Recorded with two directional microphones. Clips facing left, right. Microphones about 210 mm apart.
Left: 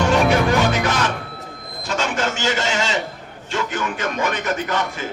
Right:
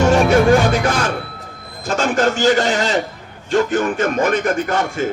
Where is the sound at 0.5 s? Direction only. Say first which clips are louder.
Right 4 dB; 50° right (ahead or behind).